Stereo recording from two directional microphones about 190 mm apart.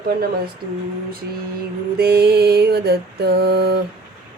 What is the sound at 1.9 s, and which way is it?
Mantra, 55° right (ahead or behind).